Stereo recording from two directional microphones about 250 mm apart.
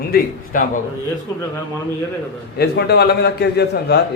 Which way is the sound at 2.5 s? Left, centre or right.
Left.